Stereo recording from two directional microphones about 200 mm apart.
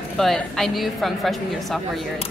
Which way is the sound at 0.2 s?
Centre (ahead or behind).